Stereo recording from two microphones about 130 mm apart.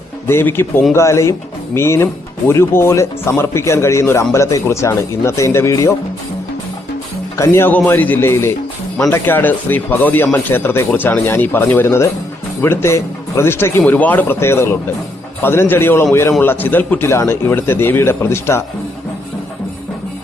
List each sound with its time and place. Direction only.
0.3 s speech: 20° left (ahead or behind)
7.3 s speech: 20° left (ahead or behind)